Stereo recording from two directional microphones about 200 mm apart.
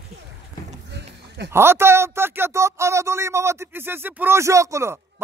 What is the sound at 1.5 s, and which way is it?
Speech, 10° right (ahead or behind).